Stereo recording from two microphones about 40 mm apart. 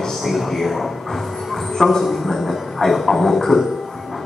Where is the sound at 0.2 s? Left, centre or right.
Centre.